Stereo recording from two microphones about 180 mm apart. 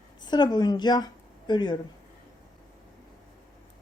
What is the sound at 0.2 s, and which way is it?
Speech, 25° left (ahead or behind).